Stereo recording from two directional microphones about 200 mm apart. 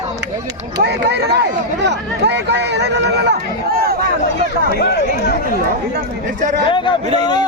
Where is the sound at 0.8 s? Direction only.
55° right (ahead or behind).